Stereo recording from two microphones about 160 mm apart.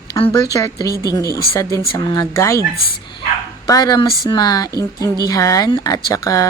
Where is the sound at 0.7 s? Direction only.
20° right (ahead or behind).